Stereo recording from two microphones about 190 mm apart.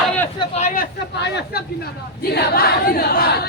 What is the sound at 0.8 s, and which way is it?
Speech, 60° left (ahead or behind).